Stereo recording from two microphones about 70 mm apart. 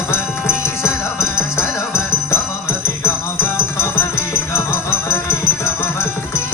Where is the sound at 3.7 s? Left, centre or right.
Left.